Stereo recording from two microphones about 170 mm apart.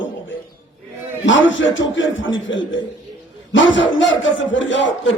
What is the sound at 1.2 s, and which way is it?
A man's voice, 90° left.